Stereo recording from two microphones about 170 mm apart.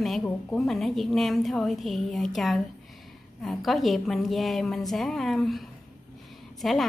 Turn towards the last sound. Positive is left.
turn(degrees=0)  # may be behind; listen again after turning